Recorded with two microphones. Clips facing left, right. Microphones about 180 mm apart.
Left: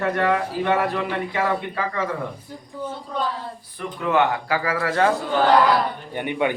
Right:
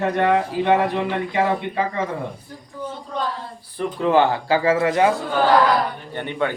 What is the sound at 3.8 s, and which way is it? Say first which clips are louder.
Speech: right 4 dB; 30° right (ahead or behind).